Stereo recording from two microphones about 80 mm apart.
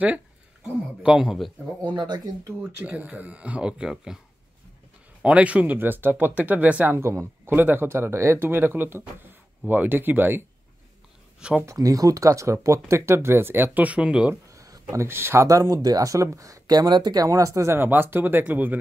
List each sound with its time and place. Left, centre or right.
1.0 s a man's voice: centre
1.9 s speech: right
2.8 s speech: centre
5.2 s speech: centre
7.0 s speech: right
11.3 s speech: centre
11.6 s speech: right; by 14.3 s centre
14.5 s a sound: right
15.4 s speech: right